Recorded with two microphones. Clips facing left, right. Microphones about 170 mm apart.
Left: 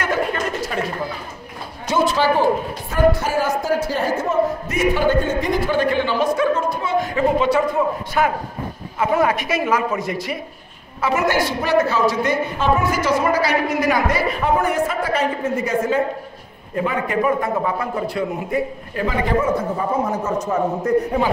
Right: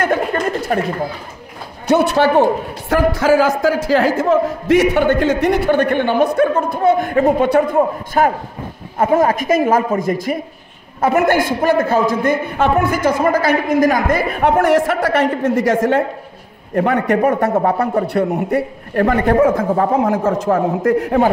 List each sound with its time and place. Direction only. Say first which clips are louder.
0.7 s speech: right 9 dB; 50° right (ahead or behind)
1.9 s speech: right 5 dB; 65° right (ahead or behind)
2.9 s a woman's voice: right 4 dB; 90° right; by 14.5 s 55° right (ahead or behind)
14.6 s a woman's voice: right 6 dB; 90° right
16.7 s a man's voice: right 6 dB; 70° right (ahead or behind)
17.5 s a woman's voice: right 6 dB; 45° right (ahead or behind)
18.0 s speech: right 6 dB; 65° right (ahead or behind)